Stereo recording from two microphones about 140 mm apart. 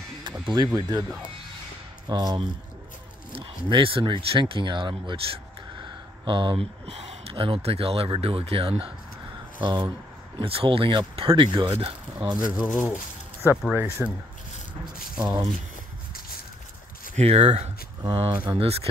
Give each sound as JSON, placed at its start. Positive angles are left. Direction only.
{"t": 0.5, "sound": "speech", "side_deg": -30}
{"t": 2.0, "sound": "speech", "side_deg": -30}
{"t": 6.9, "sound": "speech", "side_deg": -45}
{"t": 12.6, "sound": "speech", "side_deg": 0}
{"t": 13.4, "sound": "speech", "side_deg": -15}
{"t": 15.2, "sound": "speech", "side_deg": -30}
{"t": 17.1, "sound": "speech", "side_deg": -50}
{"t": 18.3, "sound": "speech", "side_deg": -10}